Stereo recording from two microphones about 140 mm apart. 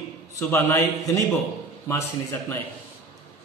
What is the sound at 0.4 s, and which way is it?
Speech, 20° left (ahead or behind).